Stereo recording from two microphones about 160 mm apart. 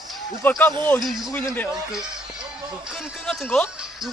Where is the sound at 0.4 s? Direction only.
10° left (ahead or behind).